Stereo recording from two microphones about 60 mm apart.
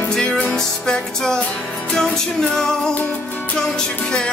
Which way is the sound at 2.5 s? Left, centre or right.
Centre.